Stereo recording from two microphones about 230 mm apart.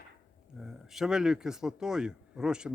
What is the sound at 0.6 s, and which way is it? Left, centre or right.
Speech, centre.